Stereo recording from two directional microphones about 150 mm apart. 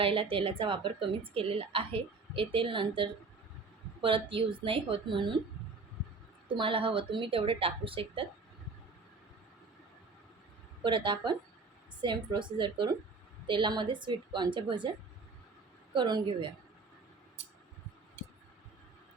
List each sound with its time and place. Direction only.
0.0 s speech: 35° right (ahead or behind)
6.5 s speech: 35° right (ahead or behind)
10.8 s speech: 30° right (ahead or behind)
16.0 s speech: 30° right (ahead or behind)